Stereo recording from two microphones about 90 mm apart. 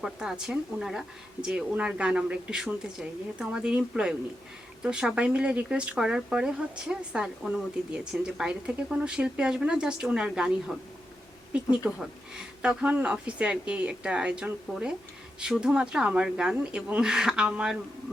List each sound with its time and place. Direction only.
0.0 s speech: 5° right (ahead or behind)
4.8 s speech: 10° right (ahead or behind)